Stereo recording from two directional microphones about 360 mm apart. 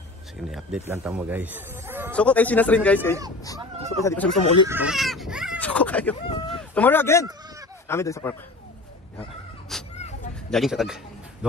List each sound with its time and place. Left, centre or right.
0.5 s speech: centre
4.6 s speech: centre
9.9 s a sound: centre
10.5 s speech: centre